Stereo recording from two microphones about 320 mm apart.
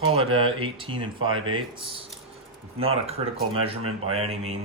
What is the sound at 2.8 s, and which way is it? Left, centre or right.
Mantra, centre.